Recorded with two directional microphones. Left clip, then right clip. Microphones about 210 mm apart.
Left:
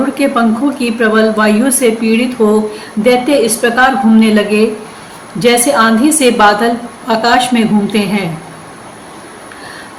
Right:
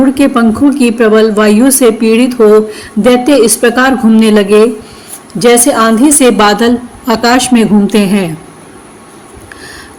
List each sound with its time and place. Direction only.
0.1 s a woman's voice: 55° right (ahead or behind)